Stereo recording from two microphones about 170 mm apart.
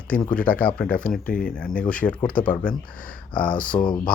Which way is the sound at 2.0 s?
30° left (ahead or behind).